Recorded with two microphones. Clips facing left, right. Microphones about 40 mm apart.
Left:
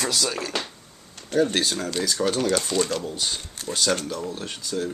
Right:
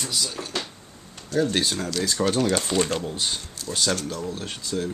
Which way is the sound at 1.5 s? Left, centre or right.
Centre.